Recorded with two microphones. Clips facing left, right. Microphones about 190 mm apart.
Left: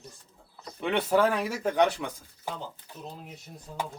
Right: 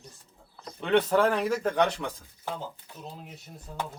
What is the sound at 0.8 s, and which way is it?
A man's voice, 10° left (ahead or behind).